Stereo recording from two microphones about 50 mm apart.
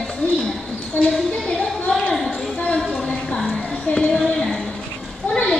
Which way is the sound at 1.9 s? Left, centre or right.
Centre.